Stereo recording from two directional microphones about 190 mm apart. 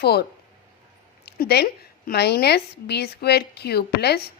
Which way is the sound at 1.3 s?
60° left (ahead or behind).